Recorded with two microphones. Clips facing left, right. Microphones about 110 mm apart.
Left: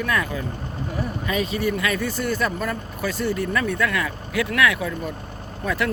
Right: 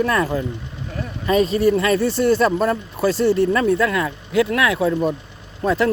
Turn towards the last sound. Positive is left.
turn(degrees=-30)  # may be behind; listen again after turning